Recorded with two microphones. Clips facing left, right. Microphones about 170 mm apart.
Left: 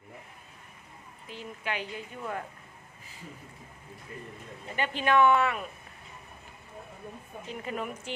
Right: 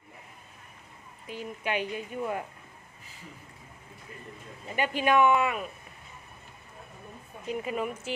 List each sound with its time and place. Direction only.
1.3 s speech: 15° right (ahead or behind)
4.8 s speech: 15° right (ahead or behind)
7.6 s speech: 5° right (ahead or behind)